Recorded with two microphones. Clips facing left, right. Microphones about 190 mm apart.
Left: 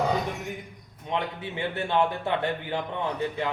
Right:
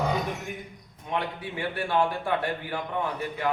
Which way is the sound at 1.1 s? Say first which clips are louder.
Left 1 dB; 20° left (ahead or behind).